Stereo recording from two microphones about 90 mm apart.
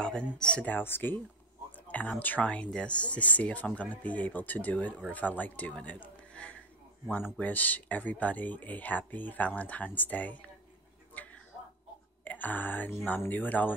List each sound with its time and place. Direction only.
0.0 s speech: 10° left (ahead or behind)
11.2 s a sound: 20° left (ahead or behind)
12.3 s speech: 20° left (ahead or behind)